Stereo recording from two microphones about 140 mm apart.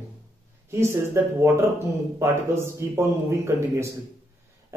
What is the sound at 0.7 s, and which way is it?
Speech, 20° right (ahead or behind).